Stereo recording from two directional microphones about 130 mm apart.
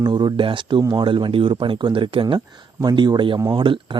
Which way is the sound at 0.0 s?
35° right (ahead or behind).